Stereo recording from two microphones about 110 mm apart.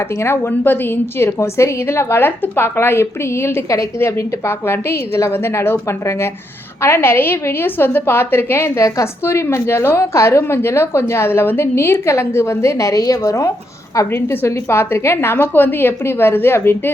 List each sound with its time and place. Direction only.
0.0 s a woman's voice: 25° left (ahead or behind)